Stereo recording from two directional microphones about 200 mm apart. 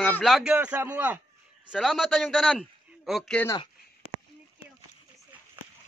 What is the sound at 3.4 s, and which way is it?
Speech, 15° left (ahead or behind).